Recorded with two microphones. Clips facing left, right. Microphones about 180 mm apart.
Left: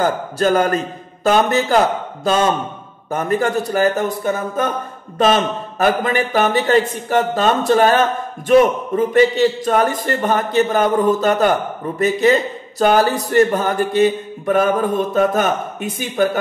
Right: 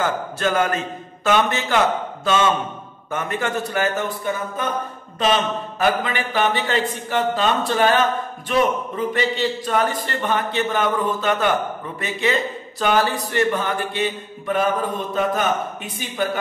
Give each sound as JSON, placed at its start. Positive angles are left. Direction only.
{"t": 0.0, "sound": "a man's voice", "side_deg": 40}